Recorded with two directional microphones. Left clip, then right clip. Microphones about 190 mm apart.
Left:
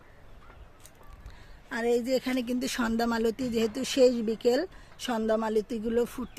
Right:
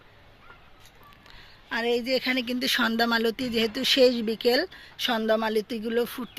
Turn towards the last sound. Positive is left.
turn(degrees=10)  # may be behind; listen again after turning